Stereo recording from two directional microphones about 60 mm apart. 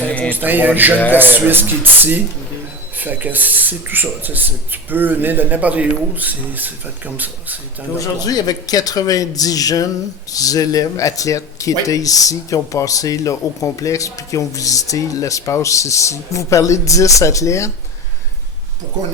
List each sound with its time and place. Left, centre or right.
0.1 s music: left
0.3 s speech: right
7.9 s speech: left